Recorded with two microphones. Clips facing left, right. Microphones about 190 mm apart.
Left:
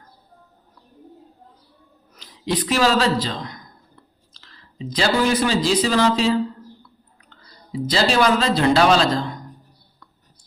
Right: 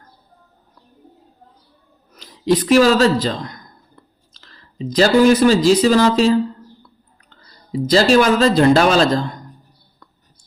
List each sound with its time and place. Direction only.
2.1 s speech: 45° right (ahead or behind)